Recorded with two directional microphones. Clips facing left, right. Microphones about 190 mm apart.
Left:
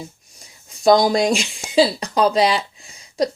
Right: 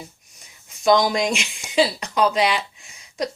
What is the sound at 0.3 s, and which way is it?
Speech, 35° left (ahead or behind).